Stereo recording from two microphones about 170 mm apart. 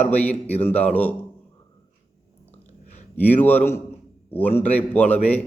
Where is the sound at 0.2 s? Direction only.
10° left (ahead or behind).